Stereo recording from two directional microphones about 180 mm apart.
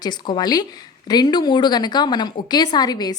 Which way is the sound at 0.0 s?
25° left (ahead or behind).